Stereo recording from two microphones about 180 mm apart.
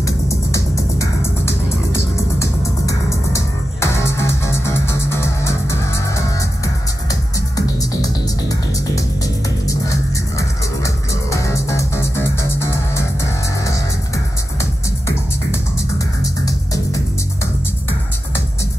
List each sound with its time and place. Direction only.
0.0 s music: 15° left (ahead or behind)
7.1 s music: 20° left (ahead or behind)
10.8 s music: 15° left (ahead or behind)